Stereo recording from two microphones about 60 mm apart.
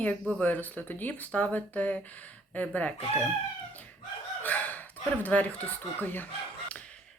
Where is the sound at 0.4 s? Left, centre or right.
Left.